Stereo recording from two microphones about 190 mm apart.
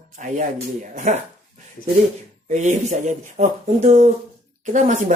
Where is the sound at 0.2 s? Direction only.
40° right (ahead or behind).